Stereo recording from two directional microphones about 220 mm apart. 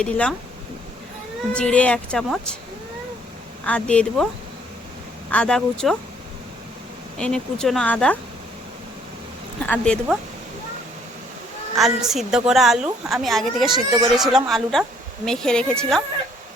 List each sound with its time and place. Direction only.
0.0 s a woman's voice: 5° left (ahead or behind)
1.5 s a woman's voice: 5° left (ahead or behind)
3.7 s a woman's voice: 5° left (ahead or behind)
5.3 s a woman's voice: 5° left (ahead or behind)
7.2 s a woman's voice: 5° left (ahead or behind)
9.6 s a woman's voice: 5° left (ahead or behind)
11.7 s a woman's voice: centre (ahead or behind)
13.7 s speech: 20° right (ahead or behind)
14.2 s a woman's voice: centre (ahead or behind)